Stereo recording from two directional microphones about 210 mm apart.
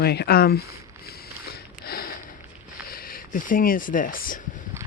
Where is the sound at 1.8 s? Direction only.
45° left (ahead or behind).